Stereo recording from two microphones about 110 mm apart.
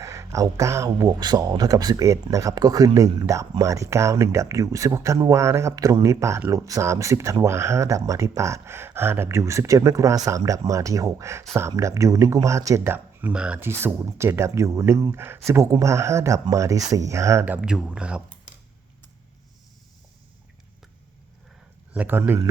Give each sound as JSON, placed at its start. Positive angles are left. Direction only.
{"t": 0.0, "sound": "speech", "side_deg": -30}
{"t": 13.3, "sound": "speech", "side_deg": -10}
{"t": 13.6, "sound": "speech", "side_deg": -20}
{"t": 17.4, "sound": "speech", "side_deg": -10}
{"t": 21.9, "sound": "speech", "side_deg": -20}